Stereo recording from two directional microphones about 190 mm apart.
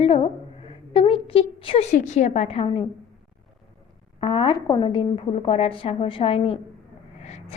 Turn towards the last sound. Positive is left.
turn(degrees=35)  # may be behind; listen again after turning